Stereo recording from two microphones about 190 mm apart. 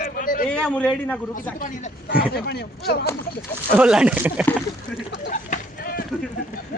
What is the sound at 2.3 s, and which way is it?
Speech, 55° left (ahead or behind).